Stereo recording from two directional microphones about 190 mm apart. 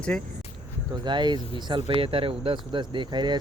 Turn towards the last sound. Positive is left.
turn(degrees=-25)  # may be behind; listen again after turning